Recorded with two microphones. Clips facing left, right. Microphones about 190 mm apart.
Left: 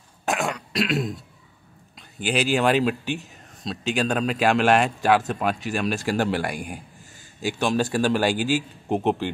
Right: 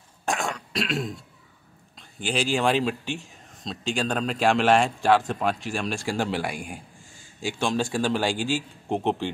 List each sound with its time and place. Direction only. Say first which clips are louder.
0.2 s throat clearing: left 3 dB; centre (ahead or behind)
2.0 s speech: left 3 dB; 5° left (ahead or behind)